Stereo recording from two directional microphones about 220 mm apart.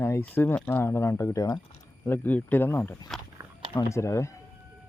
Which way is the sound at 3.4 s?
10° right (ahead or behind).